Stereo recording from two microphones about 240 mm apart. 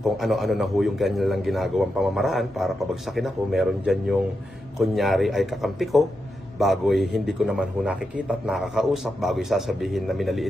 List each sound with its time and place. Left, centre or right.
0.0 s a man's voice: centre